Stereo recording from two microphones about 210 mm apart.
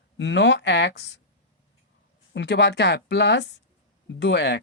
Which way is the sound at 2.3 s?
55° left (ahead or behind).